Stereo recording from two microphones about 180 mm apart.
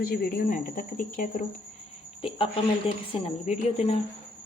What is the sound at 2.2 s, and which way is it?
Speech, 30° left (ahead or behind).